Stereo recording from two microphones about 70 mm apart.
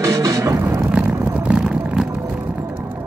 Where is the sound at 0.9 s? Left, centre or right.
Right.